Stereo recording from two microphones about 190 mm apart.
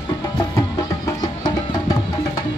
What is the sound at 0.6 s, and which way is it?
Music, 20° left (ahead or behind).